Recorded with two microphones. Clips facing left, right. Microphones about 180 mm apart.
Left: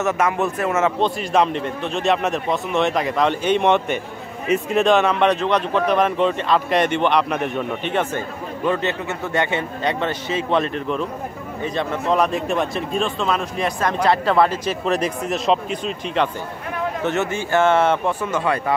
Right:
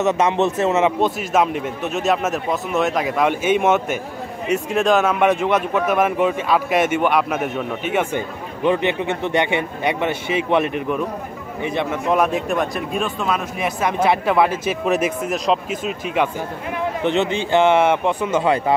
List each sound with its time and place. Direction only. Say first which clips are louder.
0.0 s a man's voice: right 3 dB; 20° right (ahead or behind); by 16.3 s 5° right (ahead or behind)
17.0 s a man's voice: right 4 dB; 15° right (ahead or behind)